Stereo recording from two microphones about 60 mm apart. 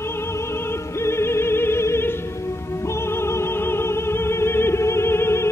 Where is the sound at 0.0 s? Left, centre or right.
Left.